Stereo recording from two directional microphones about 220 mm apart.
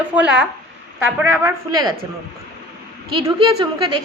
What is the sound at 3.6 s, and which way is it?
Speech, 20° right (ahead or behind).